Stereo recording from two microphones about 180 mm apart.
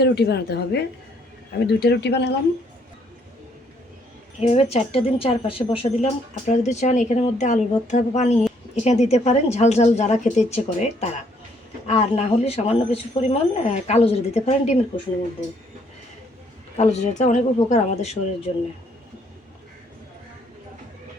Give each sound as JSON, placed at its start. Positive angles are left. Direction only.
{"t": 0.0, "sound": "a woman's voice", "side_deg": 65}
{"t": 4.4, "sound": "a woman's voice", "side_deg": 35}
{"t": 16.7, "sound": "a woman's voice", "side_deg": 40}